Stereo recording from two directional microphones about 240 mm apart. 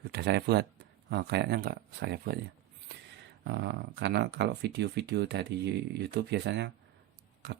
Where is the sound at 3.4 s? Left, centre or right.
Right.